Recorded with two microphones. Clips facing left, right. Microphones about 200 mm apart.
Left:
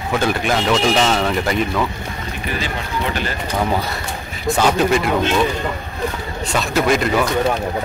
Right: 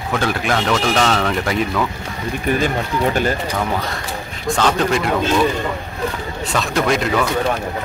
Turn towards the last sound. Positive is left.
turn(degrees=0)  # may be behind; listen again after turning